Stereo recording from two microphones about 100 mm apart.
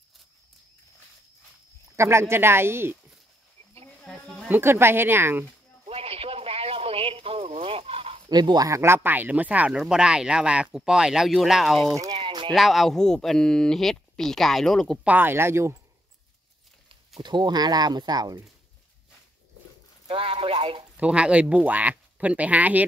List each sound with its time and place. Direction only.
2.0 s speech: 25° right (ahead or behind)
4.0 s a sound: 5° left (ahead or behind)
4.5 s speech: 25° right (ahead or behind)
5.9 s a sound: 75° right (ahead or behind)
8.3 s speech: 45° right (ahead or behind); by 15.0 s 5° left (ahead or behind)
15.0 s speech: 20° right (ahead or behind)
17.2 s speech: 45° right (ahead or behind)
20.1 s speech: 70° right (ahead or behind)
21.0 s speech: 10° right (ahead or behind)